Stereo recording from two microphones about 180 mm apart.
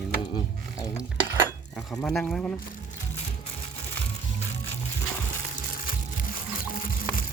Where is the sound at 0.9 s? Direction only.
10° right (ahead or behind).